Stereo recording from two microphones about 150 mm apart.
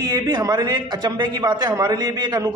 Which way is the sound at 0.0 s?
25° right (ahead or behind).